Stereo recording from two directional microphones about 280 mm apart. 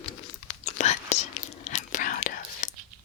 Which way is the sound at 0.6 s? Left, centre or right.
Left.